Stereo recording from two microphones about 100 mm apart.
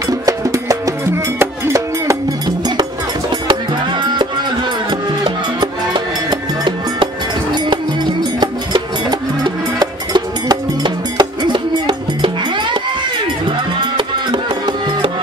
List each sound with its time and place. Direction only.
0.2 s music: 35° right (ahead or behind)
5.2 s music: 55° right (ahead or behind)
7.5 s music: 50° right (ahead or behind)